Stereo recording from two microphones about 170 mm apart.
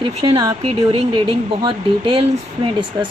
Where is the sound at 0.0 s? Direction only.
30° right (ahead or behind).